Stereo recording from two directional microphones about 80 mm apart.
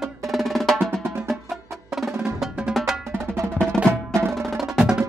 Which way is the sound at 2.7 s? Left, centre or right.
Centre.